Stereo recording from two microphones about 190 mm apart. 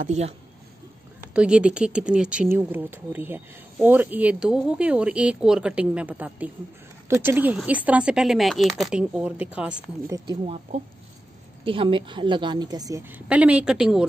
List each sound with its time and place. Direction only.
0.0 s speech: 35° right (ahead or behind)
1.3 s speech: 5° right (ahead or behind)
10.4 s a woman's voice: 30° right (ahead or behind)
13.1 s speech: 5° right (ahead or behind)